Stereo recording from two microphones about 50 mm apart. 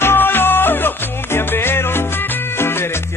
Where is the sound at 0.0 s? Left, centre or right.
Left.